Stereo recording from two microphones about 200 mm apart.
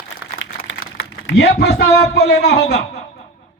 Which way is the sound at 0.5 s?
50° left (ahead or behind).